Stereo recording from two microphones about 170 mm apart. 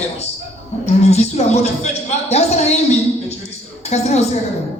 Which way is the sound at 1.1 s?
40° left (ahead or behind).